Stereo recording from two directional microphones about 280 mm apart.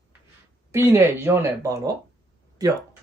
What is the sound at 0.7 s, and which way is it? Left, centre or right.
Speech, centre.